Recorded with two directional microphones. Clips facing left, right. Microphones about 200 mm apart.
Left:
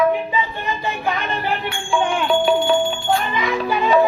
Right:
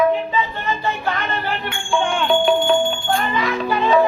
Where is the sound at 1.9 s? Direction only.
5° left (ahead or behind).